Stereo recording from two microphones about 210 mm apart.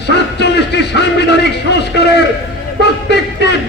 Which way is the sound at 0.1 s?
55° left (ahead or behind).